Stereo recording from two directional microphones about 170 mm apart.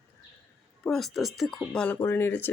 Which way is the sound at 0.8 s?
Centre (ahead or behind).